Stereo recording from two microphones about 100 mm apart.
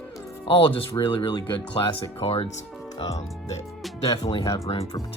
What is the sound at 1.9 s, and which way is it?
Speech, 75° left (ahead or behind).